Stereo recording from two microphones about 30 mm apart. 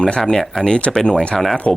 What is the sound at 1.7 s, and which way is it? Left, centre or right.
Speech, centre.